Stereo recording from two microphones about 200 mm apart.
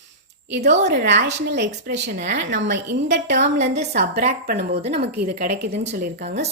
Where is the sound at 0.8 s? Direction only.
60° right (ahead or behind).